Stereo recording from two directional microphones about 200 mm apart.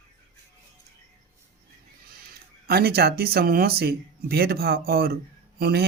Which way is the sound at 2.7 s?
50° right (ahead or behind).